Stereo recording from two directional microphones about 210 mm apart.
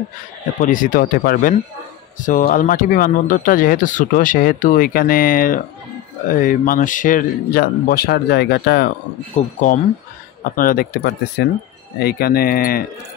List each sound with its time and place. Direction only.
0.6 s speech: 40° left (ahead or behind)
9.4 s speech: 35° left (ahead or behind)